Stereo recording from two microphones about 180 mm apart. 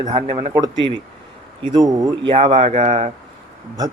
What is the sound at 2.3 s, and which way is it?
Speech, 40° right (ahead or behind).